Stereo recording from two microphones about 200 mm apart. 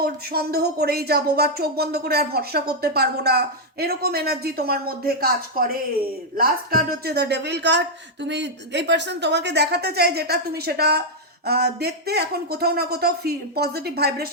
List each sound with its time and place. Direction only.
0.0 s speech: 50° right (ahead or behind)